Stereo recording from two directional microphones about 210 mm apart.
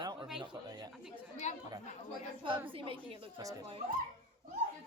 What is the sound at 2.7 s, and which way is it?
Speech, 25° right (ahead or behind).